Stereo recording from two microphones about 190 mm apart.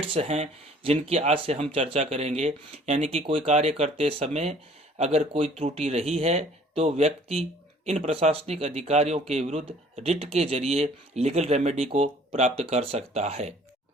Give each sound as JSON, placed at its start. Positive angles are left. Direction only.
{"t": 0.0, "sound": "speech", "side_deg": -30}